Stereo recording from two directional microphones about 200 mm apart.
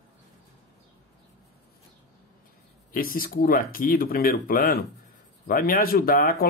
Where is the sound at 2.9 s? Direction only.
45° left (ahead or behind).